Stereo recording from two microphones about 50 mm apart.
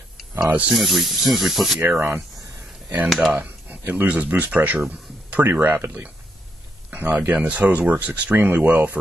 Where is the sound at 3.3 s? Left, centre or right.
Right.